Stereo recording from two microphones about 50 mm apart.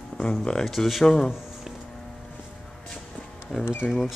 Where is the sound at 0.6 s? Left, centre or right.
Centre.